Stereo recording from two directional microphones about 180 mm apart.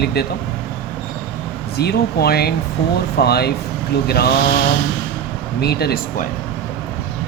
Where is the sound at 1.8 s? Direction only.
60° left (ahead or behind).